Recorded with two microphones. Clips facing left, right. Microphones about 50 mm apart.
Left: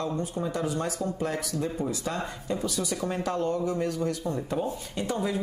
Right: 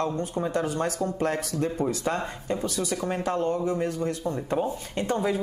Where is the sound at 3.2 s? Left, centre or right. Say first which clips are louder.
Right 2 dB; right.